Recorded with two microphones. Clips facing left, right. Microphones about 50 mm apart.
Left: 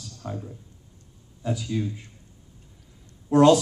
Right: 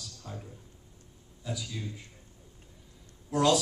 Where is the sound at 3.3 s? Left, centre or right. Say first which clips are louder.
Left 9 dB; left.